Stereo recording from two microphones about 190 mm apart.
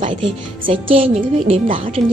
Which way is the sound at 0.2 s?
30° right (ahead or behind).